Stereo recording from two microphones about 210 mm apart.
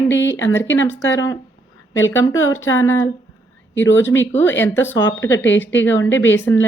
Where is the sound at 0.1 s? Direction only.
60° left (ahead or behind).